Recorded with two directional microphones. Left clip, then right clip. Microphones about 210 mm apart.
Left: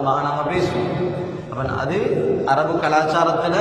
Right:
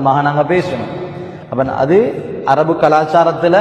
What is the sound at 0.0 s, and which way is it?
Speech, 40° right (ahead or behind).